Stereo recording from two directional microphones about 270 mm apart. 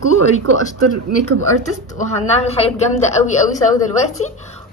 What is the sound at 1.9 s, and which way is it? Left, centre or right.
A woman's voice, left.